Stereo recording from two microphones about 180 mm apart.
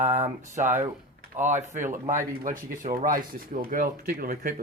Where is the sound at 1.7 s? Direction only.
45° right (ahead or behind).